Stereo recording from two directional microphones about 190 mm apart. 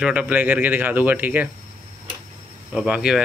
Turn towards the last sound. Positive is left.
turn(degrees=-5)  # may be behind; listen again after turning